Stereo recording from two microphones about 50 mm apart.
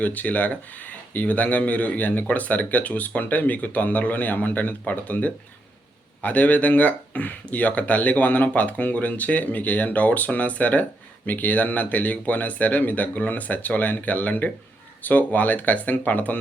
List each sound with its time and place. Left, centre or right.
0.0 s speech: left